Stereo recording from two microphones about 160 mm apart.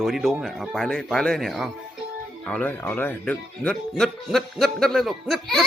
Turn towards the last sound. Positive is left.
turn(degrees=0)  # may be behind; listen again after turning